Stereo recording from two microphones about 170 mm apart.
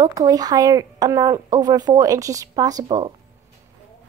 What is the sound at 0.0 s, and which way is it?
Speech, 20° right (ahead or behind).